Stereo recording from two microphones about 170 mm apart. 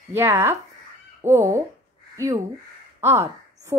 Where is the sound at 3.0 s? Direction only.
15° right (ahead or behind).